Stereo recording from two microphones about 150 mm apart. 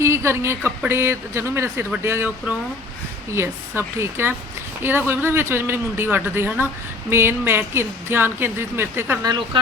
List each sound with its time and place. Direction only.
0.0 s a woman's voice: 20° right (ahead or behind)
3.3 s speech: 15° right (ahead or behind)